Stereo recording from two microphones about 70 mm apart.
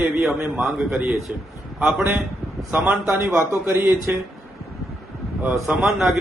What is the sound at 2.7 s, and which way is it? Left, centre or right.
A man's voice, right.